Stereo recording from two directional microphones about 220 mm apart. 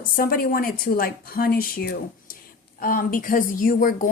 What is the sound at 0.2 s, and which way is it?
A woman's voice, 40° left (ahead or behind).